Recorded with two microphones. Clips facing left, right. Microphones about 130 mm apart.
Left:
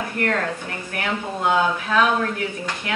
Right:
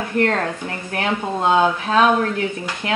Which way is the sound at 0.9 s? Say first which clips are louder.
Right 4 dB; 25° right (ahead or behind).